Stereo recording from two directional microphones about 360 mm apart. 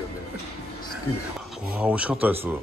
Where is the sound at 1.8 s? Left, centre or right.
Centre.